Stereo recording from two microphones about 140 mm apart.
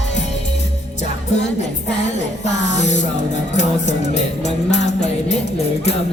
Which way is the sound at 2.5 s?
55° left (ahead or behind).